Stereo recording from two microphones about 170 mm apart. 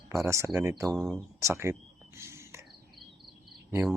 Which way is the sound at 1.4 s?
15° right (ahead or behind).